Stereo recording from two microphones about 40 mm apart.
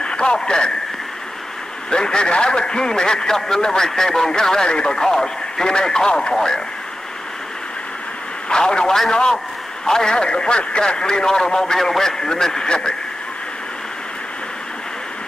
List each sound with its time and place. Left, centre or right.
0.0 s speech: left
1.9 s a man's voice: centre
8.5 s a man's voice: left